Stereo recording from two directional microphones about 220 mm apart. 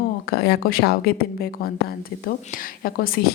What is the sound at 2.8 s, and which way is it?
Speech, 40° left (ahead or behind).